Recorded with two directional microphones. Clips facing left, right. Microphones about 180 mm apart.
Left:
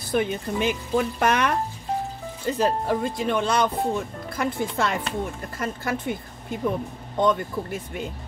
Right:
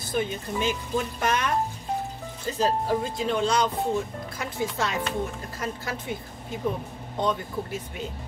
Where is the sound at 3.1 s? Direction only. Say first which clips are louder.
Even; 55° left (ahead or behind).